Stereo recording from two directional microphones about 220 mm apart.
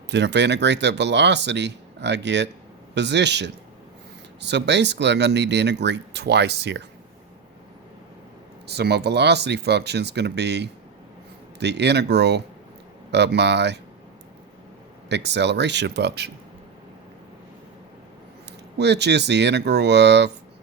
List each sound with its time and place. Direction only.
0.1 s speech: 50° right (ahead or behind)
8.6 s speech: 50° right (ahead or behind)
15.1 s speech: 50° right (ahead or behind)
18.8 s speech: 50° right (ahead or behind)